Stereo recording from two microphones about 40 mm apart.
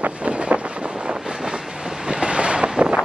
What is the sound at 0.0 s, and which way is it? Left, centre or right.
Vehicle, right.